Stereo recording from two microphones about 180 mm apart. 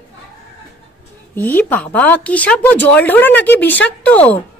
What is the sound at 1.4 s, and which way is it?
Speech, 10° left (ahead or behind).